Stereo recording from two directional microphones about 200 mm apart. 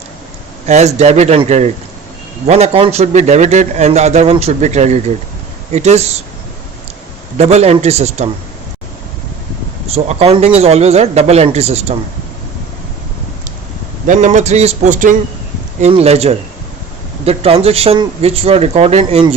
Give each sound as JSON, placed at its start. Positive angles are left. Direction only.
{"t": 0.7, "sound": "a man's voice", "side_deg": -35}
{"t": 7.3, "sound": "a man's voice", "side_deg": -35}
{"t": 9.9, "sound": "a man's voice", "side_deg": -30}
{"t": 14.1, "sound": "a man's voice", "side_deg": -35}